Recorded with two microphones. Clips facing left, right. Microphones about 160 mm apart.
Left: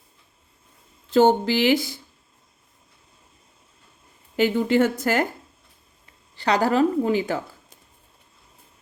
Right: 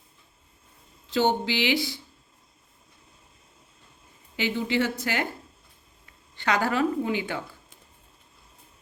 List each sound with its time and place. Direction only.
1.1 s a woman's voice: 45° left (ahead or behind)
4.4 s a woman's voice: 50° left (ahead or behind)
6.3 s speech: 35° left (ahead or behind)